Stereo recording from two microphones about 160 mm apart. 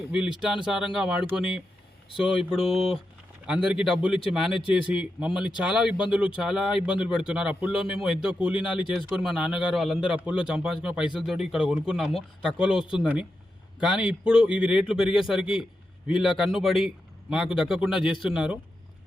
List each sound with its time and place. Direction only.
0.1 s speech: 5° right (ahead or behind)